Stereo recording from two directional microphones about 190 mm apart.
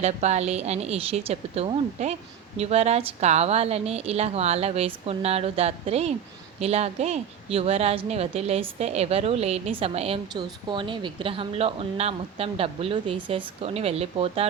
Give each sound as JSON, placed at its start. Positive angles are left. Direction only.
{"t": 0.0, "sound": "a woman's voice", "side_deg": -35}